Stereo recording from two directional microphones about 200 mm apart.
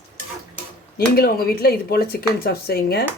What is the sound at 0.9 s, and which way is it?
Speech, 50° left (ahead or behind).